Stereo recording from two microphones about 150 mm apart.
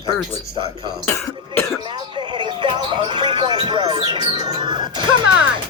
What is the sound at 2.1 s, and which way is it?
Speech, 30° right (ahead or behind).